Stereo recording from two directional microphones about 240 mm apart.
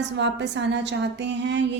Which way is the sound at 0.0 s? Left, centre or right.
Right.